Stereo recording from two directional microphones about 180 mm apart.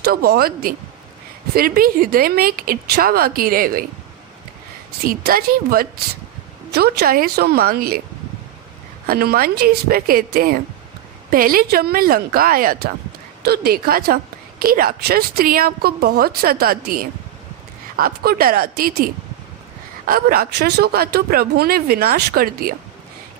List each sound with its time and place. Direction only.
0.0 s a woman's voice: 60° right (ahead or behind)
5.0 s a woman's voice: 55° right (ahead or behind)
9.0 s a woman's voice: 60° right (ahead or behind)